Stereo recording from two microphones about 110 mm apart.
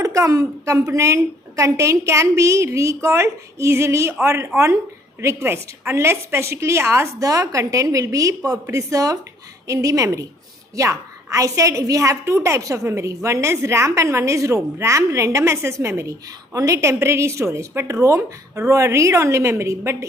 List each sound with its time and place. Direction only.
0.0 s a woman's voice: 30° right (ahead or behind)